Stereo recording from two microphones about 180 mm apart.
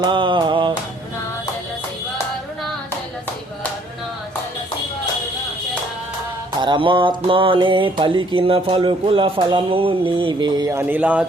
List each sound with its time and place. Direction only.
0.0 s music: 25° right (ahead or behind)
6.6 s music: 25° right (ahead or behind); by 11.3 s 10° right (ahead or behind)